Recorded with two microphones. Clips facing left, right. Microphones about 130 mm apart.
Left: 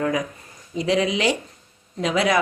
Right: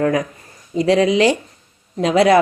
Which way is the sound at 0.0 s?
50° right (ahead or behind).